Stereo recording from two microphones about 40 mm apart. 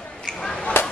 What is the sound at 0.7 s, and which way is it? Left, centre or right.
Whip, left.